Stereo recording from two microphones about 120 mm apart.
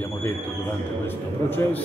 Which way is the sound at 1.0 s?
15° left (ahead or behind).